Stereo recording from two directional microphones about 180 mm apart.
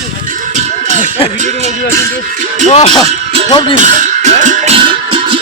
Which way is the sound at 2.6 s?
40° left (ahead or behind).